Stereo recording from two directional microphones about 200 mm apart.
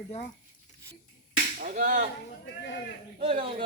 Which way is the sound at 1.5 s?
40° right (ahead or behind).